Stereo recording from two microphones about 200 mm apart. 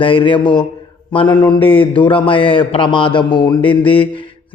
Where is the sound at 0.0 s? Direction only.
25° left (ahead or behind).